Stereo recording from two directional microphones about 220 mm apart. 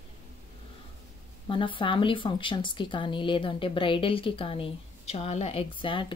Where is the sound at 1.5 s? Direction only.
20° left (ahead or behind).